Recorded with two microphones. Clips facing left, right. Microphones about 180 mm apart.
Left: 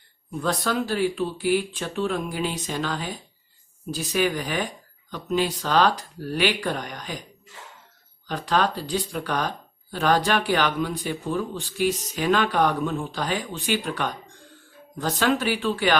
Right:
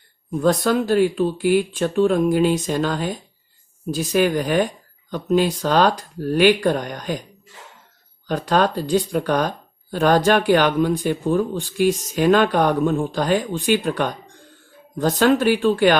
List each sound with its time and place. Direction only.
0.3 s speech: 45° right (ahead or behind)
8.3 s speech: 45° right (ahead or behind)